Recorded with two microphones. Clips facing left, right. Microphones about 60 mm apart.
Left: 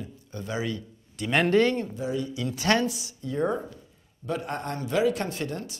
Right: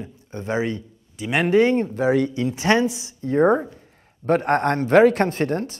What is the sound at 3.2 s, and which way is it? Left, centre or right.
Speech, right.